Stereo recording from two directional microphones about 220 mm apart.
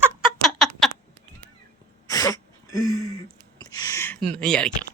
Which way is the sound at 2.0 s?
15° left (ahead or behind).